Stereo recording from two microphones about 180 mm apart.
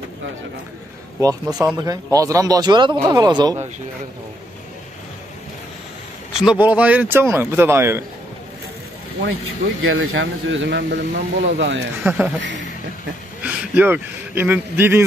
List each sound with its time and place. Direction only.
1.2 s speech: 20° right (ahead or behind)
6.4 s speech: 5° right (ahead or behind)
9.8 s speech: 90° right
12.0 s speech: 10° right (ahead or behind)
13.4 s speech: 10° right (ahead or behind)